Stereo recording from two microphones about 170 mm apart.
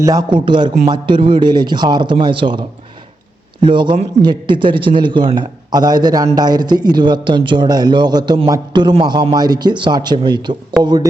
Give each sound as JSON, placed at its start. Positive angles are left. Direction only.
{"t": 0.0, "sound": "a man's voice", "side_deg": -20}
{"t": 3.7, "sound": "a man's voice", "side_deg": -30}